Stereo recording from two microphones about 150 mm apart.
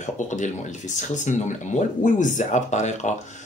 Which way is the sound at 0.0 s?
55° left (ahead or behind).